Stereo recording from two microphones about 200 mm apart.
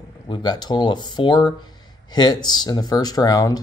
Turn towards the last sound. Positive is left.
turn(degrees=20)  # may be behind; listen again after turning